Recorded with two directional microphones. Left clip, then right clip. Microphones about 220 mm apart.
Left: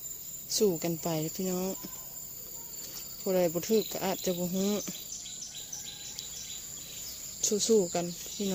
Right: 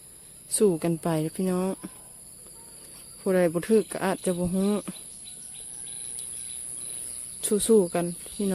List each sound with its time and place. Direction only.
0.5 s speech: 30° right (ahead or behind)
3.2 s speech: 30° right (ahead or behind)
7.4 s speech: 35° right (ahead or behind)